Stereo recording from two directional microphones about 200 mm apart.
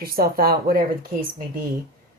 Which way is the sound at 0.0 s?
50° right (ahead or behind).